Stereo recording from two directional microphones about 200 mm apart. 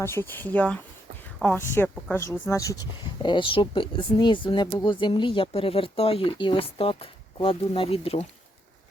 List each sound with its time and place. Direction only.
0.0 s speech: 10° left (ahead or behind)
3.2 s speech: 25° left (ahead or behind)